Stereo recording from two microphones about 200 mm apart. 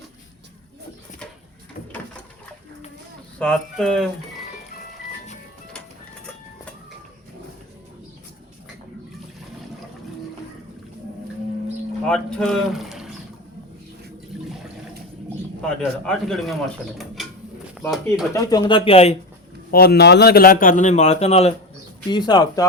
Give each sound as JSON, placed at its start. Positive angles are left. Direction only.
{"t": 3.3, "sound": "speech", "side_deg": 5}
{"t": 12.0, "sound": "speech", "side_deg": 5}
{"t": 15.6, "sound": "a man's voice", "side_deg": 5}
{"t": 17.8, "sound": "a man's voice", "side_deg": 0}
{"t": 18.3, "sound": "speech", "side_deg": 20}
{"t": 19.7, "sound": "a man's voice", "side_deg": 50}
{"t": 22.1, "sound": "speech", "side_deg": 20}